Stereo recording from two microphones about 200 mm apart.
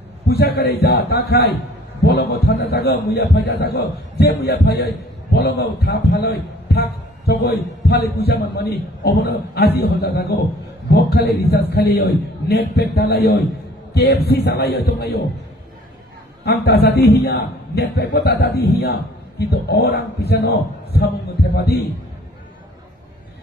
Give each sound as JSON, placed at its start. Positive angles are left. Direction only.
{"t": 0.3, "sound": "a man's voice", "side_deg": 55}
{"t": 16.4, "sound": "a man's voice", "side_deg": 55}
{"t": 21.5, "sound": "a man's voice", "side_deg": 55}